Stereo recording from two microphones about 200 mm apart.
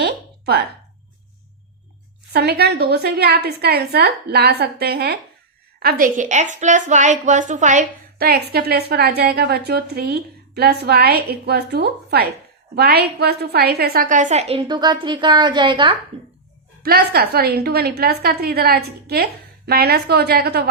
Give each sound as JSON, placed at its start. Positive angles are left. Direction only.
{"t": 0.0, "sound": "a sound", "side_deg": -50}
{"t": 2.3, "sound": "a woman's voice", "side_deg": -55}
{"t": 16.8, "sound": "a woman's voice", "side_deg": -50}